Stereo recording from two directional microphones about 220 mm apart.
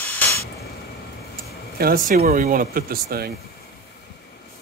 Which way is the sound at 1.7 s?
40° right (ahead or behind).